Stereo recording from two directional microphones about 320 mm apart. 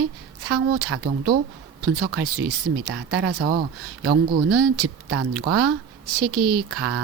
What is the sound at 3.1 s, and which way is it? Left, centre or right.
Speech, right.